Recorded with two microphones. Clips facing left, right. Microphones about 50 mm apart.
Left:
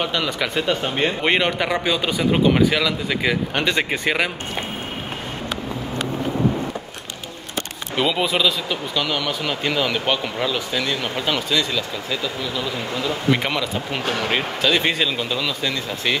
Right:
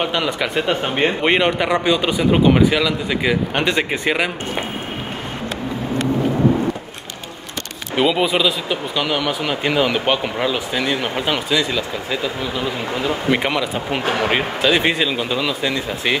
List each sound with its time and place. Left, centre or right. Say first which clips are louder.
0.0 s speech: right 2 dB; centre
7.9 s speech: right 4 dB; centre